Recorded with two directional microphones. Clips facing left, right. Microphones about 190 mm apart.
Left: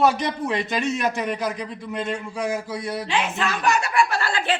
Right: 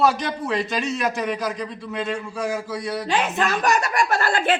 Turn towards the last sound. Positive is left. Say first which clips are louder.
# right 3 dB
turn(degrees=-45)  # may be behind; listen again after turning